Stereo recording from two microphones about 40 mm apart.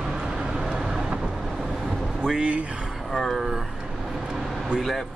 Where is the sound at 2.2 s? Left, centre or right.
Right.